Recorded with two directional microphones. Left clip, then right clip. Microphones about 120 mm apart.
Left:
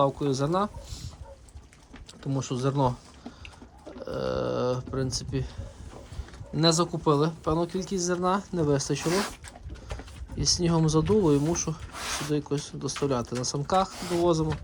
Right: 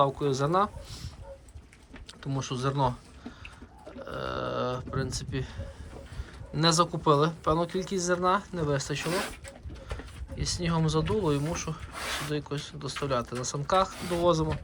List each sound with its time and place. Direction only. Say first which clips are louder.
0.0 s speech: even; 45° left (ahead or behind)
2.2 s speech: left 2 dB; 65° left (ahead or behind)
4.0 s a sound: left 4 dB; 70° left (ahead or behind)
4.9 s speech: left 3 dB; 55° left (ahead or behind)
6.5 s speech: even; 40° left (ahead or behind); by 9.0 s 65° left (ahead or behind)
10.3 s speech: left 5 dB; 65° left (ahead or behind)
11.9 s speech: even; centre (ahead or behind)
12.3 s speech: left 4 dB; 65° left (ahead or behind); by 14.5 s 40° left (ahead or behind)